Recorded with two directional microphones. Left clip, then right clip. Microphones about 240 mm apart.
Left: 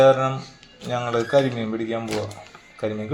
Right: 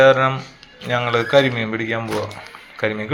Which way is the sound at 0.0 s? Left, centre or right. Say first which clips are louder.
Right 3 dB; centre.